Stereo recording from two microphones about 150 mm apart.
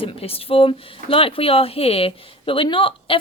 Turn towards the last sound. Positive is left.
turn(degrees=35)  # may be behind; listen again after turning